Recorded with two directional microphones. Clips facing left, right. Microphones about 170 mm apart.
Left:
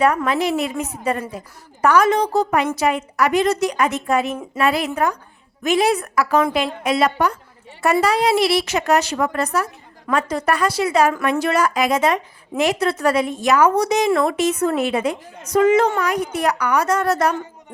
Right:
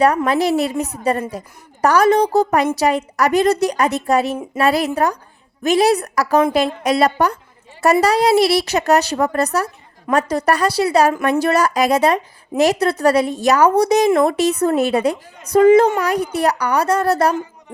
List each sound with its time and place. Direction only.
0.3 s a woman's voice: 35° right (ahead or behind)